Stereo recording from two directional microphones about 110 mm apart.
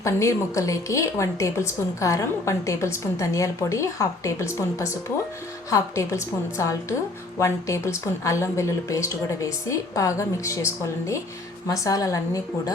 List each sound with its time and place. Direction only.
0.0 s a woman's voice: 25° left (ahead or behind)